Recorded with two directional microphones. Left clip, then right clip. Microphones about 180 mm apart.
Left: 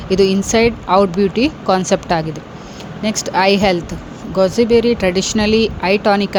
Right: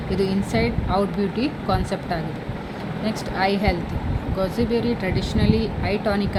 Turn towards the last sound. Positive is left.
turn(degrees=45)  # may be behind; listen again after turning